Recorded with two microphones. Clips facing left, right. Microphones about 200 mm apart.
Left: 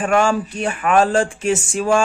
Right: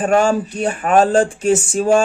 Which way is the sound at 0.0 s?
35° right (ahead or behind).